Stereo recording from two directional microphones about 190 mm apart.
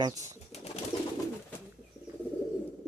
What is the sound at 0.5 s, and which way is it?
Pigeon, 35° left (ahead or behind).